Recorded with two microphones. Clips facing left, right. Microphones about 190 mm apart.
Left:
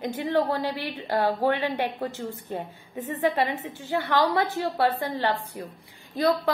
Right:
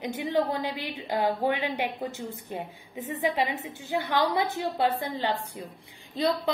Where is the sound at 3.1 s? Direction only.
10° right (ahead or behind).